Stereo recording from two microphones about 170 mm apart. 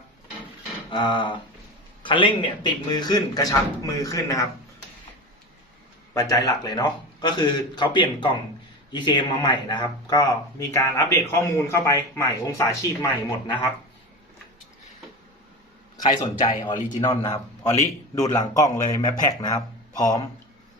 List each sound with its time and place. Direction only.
0.9 s a man's voice: 30° left (ahead or behind)
6.1 s a man's voice: 20° left (ahead or behind)
16.0 s a man's voice: 30° left (ahead or behind)